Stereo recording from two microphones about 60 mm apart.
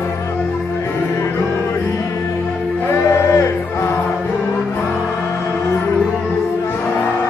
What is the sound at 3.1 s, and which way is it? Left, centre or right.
Music, left.